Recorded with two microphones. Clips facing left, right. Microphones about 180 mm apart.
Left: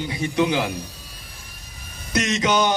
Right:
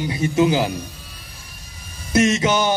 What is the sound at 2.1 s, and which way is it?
Speech, 25° right (ahead or behind).